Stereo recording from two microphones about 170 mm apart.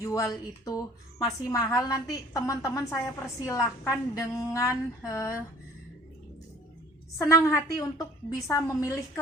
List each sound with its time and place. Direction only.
0.0 s a woman's voice: 20° left (ahead or behind)
7.2 s a woman's voice: 15° left (ahead or behind)